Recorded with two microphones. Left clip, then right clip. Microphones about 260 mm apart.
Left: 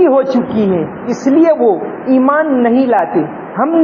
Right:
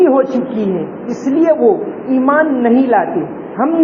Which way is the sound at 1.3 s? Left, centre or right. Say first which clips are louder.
Left 1 dB; left.